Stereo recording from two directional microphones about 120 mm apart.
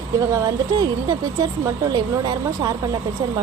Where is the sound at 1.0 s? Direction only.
30° right (ahead or behind).